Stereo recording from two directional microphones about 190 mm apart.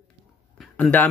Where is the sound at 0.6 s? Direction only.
5° left (ahead or behind).